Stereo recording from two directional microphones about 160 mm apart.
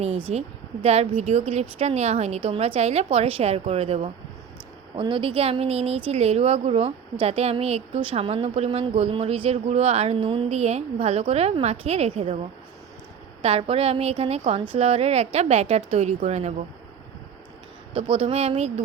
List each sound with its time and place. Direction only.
0.3 s speech: 40° right (ahead or behind)
13.4 s speech: 40° right (ahead or behind)
17.9 s speech: 35° right (ahead or behind)